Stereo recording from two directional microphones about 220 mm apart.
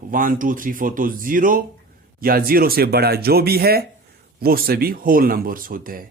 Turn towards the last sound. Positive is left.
turn(degrees=-40)  # may be behind; listen again after turning